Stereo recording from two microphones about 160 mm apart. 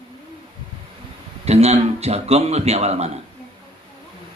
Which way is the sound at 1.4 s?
40° right (ahead or behind).